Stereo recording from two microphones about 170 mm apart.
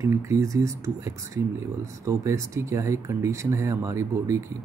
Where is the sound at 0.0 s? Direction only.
15° right (ahead or behind).